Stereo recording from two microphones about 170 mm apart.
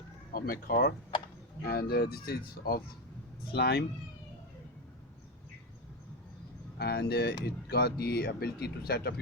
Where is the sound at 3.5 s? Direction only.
75° left (ahead or behind).